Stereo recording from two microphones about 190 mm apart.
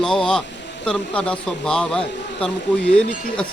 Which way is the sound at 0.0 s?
5° left (ahead or behind).